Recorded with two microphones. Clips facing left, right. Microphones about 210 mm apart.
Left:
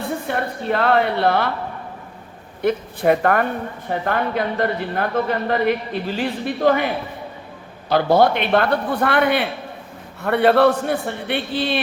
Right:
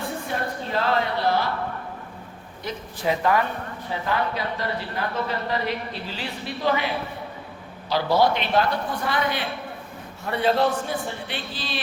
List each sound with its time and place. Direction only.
0.3 s speech: 60° left (ahead or behind)
2.6 s speech: 60° left (ahead or behind)